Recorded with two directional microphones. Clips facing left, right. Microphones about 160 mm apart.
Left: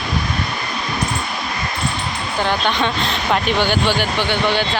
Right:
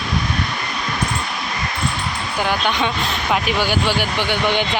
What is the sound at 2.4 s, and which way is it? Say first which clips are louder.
Speech: left 1 dB; 10° right (ahead or behind).